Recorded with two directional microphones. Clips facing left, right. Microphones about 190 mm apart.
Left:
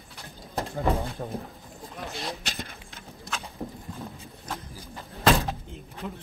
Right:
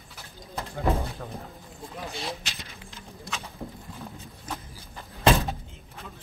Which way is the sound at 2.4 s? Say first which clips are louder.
Left 5 dB; 50° left (ahead or behind).